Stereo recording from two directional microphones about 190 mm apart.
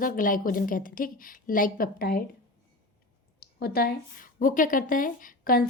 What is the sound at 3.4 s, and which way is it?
A woman's voice, 55° left (ahead or behind).